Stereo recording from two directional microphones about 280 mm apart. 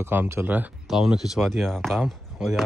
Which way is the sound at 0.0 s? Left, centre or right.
Centre.